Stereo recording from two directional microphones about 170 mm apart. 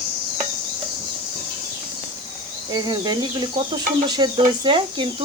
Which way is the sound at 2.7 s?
25° right (ahead or behind).